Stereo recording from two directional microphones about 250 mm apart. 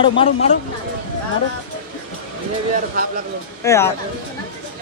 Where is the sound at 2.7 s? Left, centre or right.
Right.